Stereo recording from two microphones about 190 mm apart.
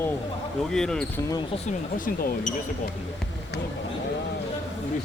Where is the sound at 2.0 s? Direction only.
50° left (ahead or behind).